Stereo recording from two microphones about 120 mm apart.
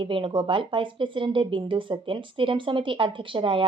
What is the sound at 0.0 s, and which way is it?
Speech, 45° right (ahead or behind).